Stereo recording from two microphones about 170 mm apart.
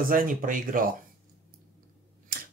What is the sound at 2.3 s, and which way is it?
Camera, 60° right (ahead or behind).